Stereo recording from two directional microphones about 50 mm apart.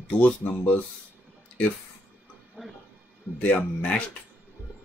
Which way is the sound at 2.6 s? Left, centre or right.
Centre.